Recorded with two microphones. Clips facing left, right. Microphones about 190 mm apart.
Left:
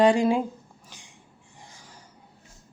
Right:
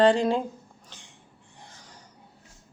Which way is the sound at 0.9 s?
10° left (ahead or behind).